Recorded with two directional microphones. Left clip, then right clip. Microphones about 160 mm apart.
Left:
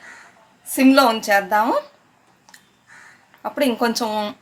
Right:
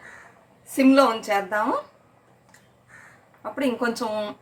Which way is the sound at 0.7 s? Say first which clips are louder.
Left 3 dB; 85° left.